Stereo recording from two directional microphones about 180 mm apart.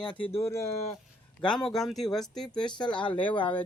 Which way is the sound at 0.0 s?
25° left (ahead or behind).